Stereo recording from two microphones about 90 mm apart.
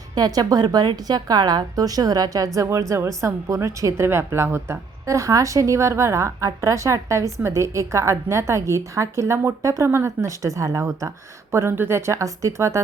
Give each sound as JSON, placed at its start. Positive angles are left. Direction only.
{"t": 0.1, "sound": "a woman's voice", "side_deg": -45}